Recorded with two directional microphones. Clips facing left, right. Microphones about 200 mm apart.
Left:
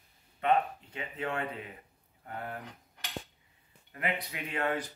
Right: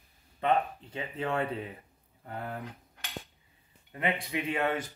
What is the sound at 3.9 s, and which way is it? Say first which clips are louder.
Speech: right 4 dB; 25° right (ahead or behind).